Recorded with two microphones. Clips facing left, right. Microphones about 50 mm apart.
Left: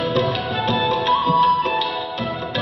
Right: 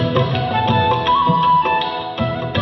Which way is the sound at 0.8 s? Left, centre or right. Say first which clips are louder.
Right 3 dB; right.